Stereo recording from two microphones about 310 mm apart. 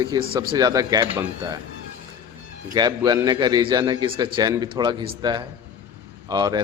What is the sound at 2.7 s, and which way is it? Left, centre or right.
Speech, centre.